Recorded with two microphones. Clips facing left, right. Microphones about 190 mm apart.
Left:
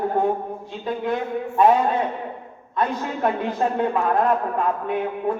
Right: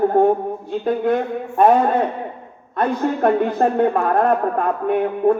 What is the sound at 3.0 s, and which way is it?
Speech, 40° right (ahead or behind).